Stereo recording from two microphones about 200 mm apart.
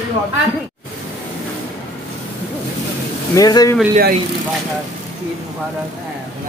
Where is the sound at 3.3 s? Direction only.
20° left (ahead or behind).